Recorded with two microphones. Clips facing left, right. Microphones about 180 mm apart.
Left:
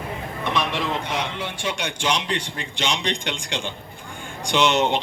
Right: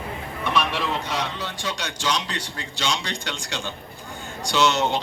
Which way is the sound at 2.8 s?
15° left (ahead or behind).